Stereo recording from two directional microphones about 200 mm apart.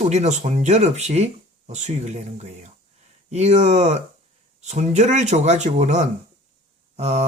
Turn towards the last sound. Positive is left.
turn(degrees=-35)  # may be behind; listen again after turning